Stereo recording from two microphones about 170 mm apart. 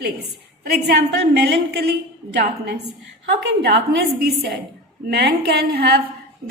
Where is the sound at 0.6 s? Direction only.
70° right (ahead or behind).